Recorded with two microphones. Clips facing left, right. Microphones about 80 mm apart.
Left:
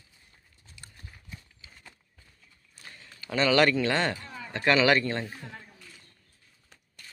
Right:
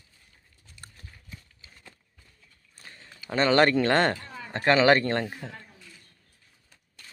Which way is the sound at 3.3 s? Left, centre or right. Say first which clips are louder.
Right 2 dB; right.